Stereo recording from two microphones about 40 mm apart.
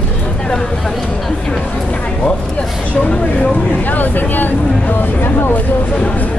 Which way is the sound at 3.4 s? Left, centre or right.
Left.